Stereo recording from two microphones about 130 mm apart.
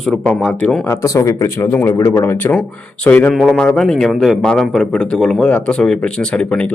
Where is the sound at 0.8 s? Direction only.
25° left (ahead or behind).